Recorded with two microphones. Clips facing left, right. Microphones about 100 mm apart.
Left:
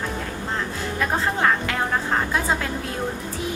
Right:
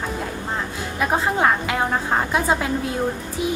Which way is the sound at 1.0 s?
15° right (ahead or behind).